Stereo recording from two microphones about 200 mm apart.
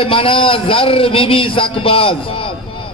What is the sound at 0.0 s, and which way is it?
A man's voice, 25° left (ahead or behind).